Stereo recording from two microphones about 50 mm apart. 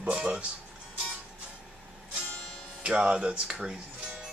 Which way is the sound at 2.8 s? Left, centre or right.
Centre.